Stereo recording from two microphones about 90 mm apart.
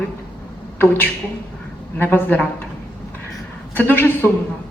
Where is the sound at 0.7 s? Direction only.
25° left (ahead or behind).